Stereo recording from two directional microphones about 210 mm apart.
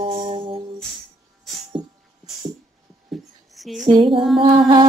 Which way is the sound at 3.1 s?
Centre (ahead or behind).